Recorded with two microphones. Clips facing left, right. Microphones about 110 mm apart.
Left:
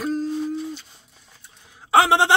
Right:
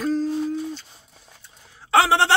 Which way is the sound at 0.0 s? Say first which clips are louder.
Right 2 dB; 10° left (ahead or behind).